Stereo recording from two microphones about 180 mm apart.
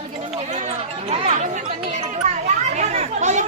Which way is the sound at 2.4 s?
40° right (ahead or behind).